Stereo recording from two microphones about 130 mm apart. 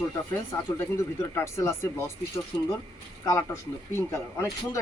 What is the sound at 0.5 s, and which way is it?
Speech, 25° left (ahead or behind).